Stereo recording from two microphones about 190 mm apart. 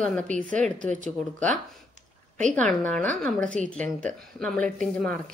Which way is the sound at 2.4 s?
40° right (ahead or behind).